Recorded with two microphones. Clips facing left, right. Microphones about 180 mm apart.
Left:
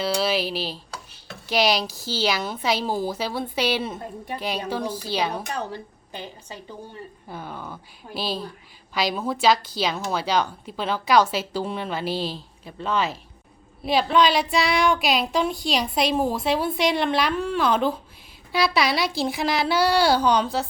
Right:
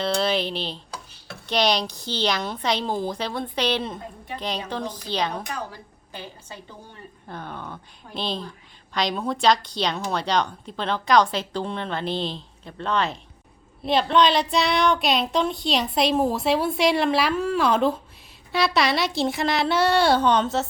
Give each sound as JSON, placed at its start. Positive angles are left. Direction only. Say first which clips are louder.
{"t": 0.0, "sound": "a woman's voice", "louder": "even", "side_deg": 5}
{"t": 5.5, "sound": "a woman's voice", "louder": "left 4 dB", "side_deg": 20}
{"t": 7.3, "sound": "a woman's voice", "louder": "right 1 dB", "side_deg": 5}